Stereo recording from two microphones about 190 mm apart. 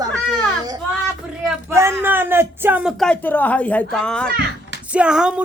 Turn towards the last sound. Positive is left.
turn(degrees=-5)  # may be behind; listen again after turning